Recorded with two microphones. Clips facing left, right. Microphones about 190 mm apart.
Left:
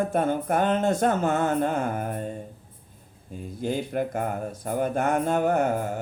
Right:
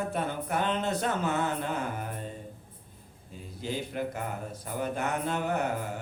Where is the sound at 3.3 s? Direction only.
50° left (ahead or behind).